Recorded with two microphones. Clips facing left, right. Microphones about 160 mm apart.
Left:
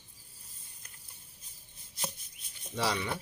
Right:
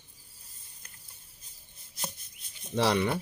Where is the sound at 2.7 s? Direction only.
65° right (ahead or behind).